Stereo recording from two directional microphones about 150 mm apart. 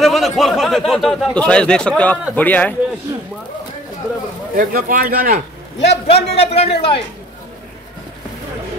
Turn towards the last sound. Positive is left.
turn(degrees=40)  # may be behind; listen again after turning